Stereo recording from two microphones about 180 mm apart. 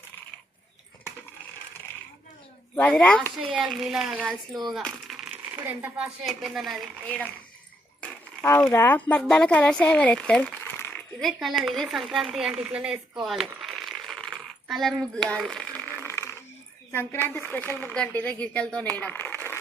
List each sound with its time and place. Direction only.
2.7 s speech: 10° left (ahead or behind)
3.3 s a child's voice: 5° right (ahead or behind); by 11.0 s 10° left (ahead or behind)
11.2 s a child's voice: centre (ahead or behind)
13.2 s coin: centre (ahead or behind); by 16.3 s 15° left (ahead or behind)
16.9 s speech: 10° left (ahead or behind)